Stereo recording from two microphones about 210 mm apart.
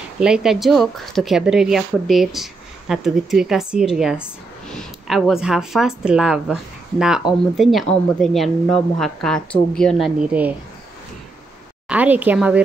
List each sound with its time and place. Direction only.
0.2 s speech: 5° right (ahead or behind)
11.9 s speech: 5° right (ahead or behind)